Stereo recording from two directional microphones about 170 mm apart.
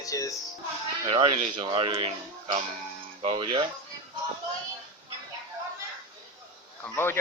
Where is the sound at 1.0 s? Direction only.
35° right (ahead or behind).